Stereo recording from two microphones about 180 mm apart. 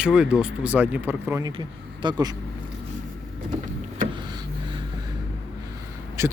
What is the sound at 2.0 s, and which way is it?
Speech, 25° right (ahead or behind).